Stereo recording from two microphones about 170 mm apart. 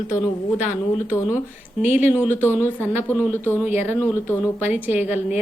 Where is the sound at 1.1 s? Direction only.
15° left (ahead or behind).